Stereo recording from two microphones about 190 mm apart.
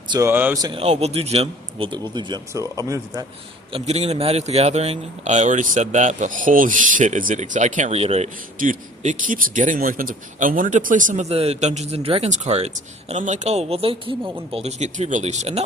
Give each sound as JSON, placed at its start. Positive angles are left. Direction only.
{"t": 0.1, "sound": "speech", "side_deg": -15}
{"t": 0.6, "sound": "speech", "side_deg": -30}
{"t": 3.7, "sound": "a man's voice", "side_deg": -30}